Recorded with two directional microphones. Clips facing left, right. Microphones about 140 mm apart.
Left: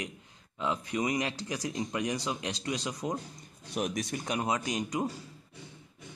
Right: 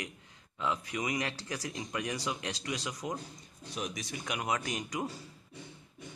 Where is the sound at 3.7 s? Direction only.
50° left (ahead or behind).